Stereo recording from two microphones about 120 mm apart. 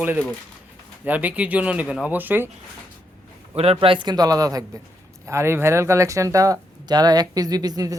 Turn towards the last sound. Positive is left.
turn(degrees=-30)  # may be behind; listen again after turning